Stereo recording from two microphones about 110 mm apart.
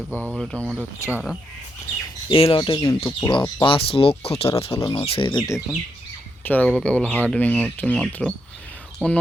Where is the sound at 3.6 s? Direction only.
55° left (ahead or behind).